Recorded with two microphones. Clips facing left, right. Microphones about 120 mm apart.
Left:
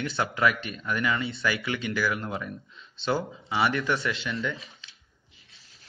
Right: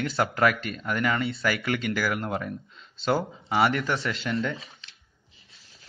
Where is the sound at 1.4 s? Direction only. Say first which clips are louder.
Right 1 dB; 45° right (ahead or behind).